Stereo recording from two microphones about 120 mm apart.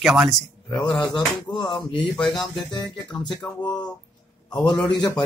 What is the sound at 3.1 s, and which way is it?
Music, 10° left (ahead or behind).